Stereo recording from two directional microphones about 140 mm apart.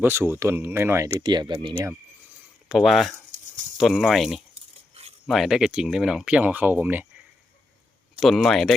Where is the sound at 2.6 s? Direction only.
5° right (ahead or behind).